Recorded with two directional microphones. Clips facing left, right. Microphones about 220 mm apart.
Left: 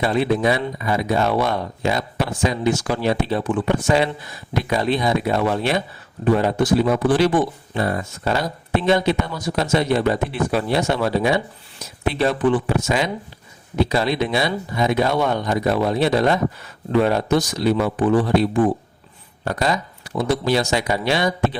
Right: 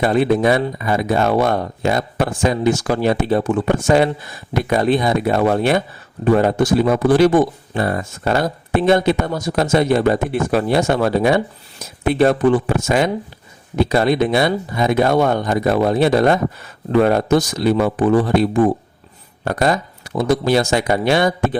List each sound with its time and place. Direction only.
0.0 s speech: 50° right (ahead or behind)